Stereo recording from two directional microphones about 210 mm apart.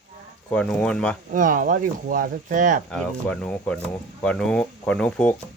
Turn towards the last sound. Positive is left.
turn(degrees=5)  # may be behind; listen again after turning